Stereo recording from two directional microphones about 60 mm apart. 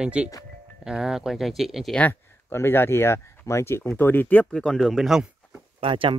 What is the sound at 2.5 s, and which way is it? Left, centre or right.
Speech, left.